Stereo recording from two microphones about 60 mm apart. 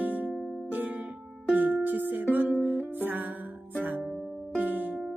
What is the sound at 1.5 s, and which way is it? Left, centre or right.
Music, right.